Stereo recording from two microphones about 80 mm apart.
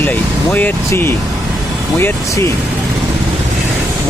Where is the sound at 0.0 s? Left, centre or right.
Left.